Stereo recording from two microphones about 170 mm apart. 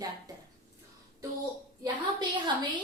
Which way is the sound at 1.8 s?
25° right (ahead or behind).